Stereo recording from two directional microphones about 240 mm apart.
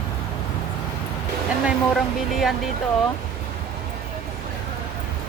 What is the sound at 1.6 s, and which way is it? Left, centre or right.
Speech, centre.